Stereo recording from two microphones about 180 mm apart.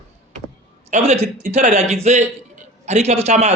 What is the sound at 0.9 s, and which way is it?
Speech, 40° right (ahead or behind).